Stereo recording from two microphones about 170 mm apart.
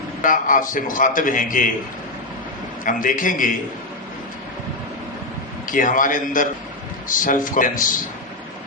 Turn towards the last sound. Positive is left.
turn(degrees=50)  # may be behind; listen again after turning